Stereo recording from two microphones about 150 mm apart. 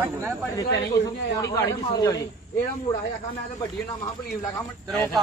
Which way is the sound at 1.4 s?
20° left (ahead or behind).